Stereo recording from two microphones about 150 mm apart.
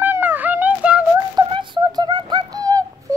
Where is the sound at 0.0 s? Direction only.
10° right (ahead or behind).